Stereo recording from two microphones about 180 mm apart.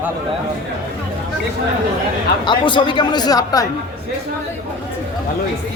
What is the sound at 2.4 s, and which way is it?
Speech, 25° left (ahead or behind).